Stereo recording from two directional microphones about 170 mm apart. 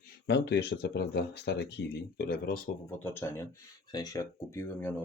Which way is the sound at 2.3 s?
55° left (ahead or behind).